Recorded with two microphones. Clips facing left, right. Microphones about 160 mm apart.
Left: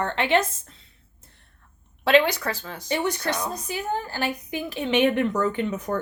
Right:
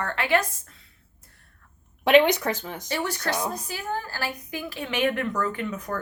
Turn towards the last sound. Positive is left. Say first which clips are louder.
# left 4 dB
turn(degrees=20)  # may be behind; listen again after turning